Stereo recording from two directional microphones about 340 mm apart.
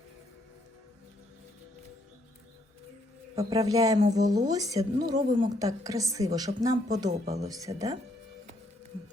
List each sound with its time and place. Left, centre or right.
3.3 s a woman's voice: centre
7.3 s a woman's voice: centre